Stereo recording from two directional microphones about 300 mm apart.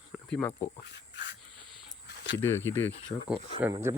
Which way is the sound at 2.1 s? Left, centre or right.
Left.